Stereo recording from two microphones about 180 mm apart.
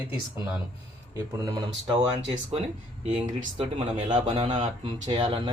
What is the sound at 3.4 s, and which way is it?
Speech, 30° right (ahead or behind).